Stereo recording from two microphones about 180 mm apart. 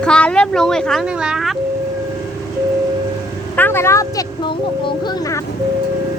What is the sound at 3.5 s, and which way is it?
Speech, 10° left (ahead or behind).